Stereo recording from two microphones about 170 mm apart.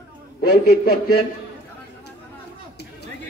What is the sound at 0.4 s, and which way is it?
Speech, 65° left (ahead or behind).